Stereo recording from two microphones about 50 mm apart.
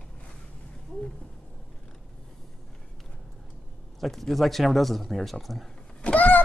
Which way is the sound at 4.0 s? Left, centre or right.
Centre.